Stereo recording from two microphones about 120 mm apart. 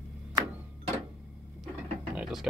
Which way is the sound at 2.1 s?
5° right (ahead or behind).